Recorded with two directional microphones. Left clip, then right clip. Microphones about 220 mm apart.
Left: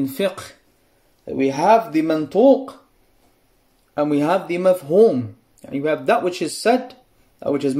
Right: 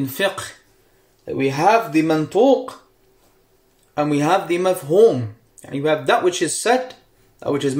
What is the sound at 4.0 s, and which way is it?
Speech, 40° left (ahead or behind).